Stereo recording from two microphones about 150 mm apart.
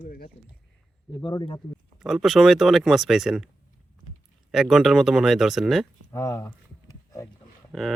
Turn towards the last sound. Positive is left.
turn(degrees=0)  # may be behind; listen again after turning